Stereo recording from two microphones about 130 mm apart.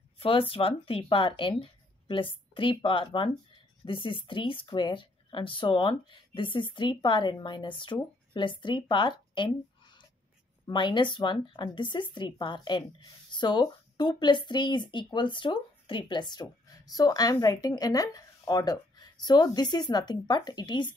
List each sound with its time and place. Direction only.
0.2 s a woman's voice: 45° left (ahead or behind)